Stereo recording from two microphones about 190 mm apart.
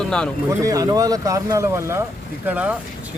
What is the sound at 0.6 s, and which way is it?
Speech, 15° right (ahead or behind).